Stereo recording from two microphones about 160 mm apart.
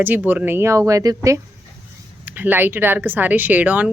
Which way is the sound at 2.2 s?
10° right (ahead or behind).